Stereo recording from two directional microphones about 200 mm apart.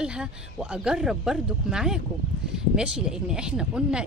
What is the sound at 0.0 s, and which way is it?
Speech, 5° right (ahead or behind).